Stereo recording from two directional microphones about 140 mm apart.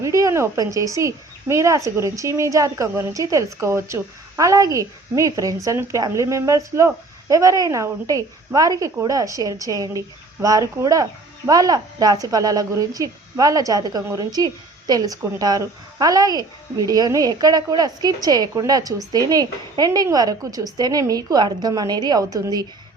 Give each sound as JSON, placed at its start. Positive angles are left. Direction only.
{"t": 0.0, "sound": "a woman's voice", "side_deg": -25}